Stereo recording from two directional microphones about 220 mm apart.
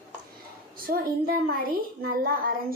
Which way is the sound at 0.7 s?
40° right (ahead or behind).